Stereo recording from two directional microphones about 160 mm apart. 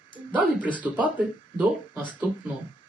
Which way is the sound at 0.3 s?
10° right (ahead or behind).